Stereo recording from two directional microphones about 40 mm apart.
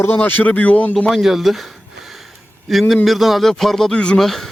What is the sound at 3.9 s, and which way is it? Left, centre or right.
Speech, left.